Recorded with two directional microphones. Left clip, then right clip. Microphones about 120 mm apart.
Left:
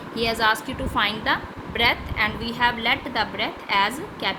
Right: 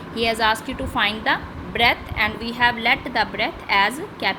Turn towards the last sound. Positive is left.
turn(degrees=-25)  # may be behind; listen again after turning